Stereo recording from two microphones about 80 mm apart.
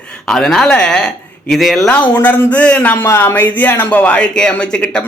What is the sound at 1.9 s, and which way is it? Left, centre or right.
A man's voice, centre.